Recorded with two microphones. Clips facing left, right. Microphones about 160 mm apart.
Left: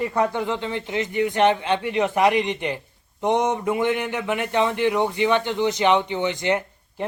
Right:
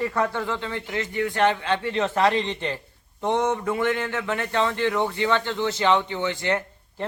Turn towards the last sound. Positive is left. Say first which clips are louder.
# left 2 dB
turn(degrees=20)  # may be behind; listen again after turning